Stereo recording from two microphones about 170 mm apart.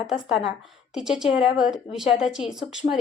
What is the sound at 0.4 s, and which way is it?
A woman's voice, centre (ahead or behind).